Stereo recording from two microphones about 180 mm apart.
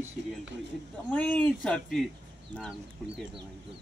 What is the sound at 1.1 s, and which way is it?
Speech, 5° left (ahead or behind).